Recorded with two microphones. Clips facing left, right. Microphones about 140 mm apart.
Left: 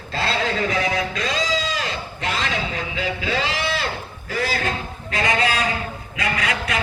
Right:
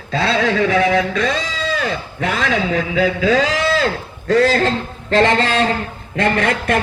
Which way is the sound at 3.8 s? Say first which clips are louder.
Right 10 dB; 85° right.